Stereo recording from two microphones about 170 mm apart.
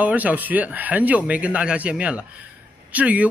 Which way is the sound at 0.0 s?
10° right (ahead or behind).